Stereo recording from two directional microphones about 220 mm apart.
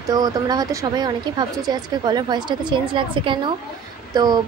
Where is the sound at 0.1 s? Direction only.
15° right (ahead or behind).